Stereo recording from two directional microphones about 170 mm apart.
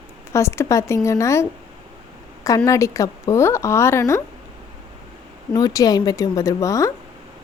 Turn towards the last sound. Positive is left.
turn(degrees=20)  # may be behind; listen again after turning